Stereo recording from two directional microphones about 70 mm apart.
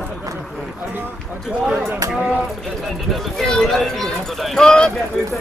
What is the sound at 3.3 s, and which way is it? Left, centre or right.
Speech, centre.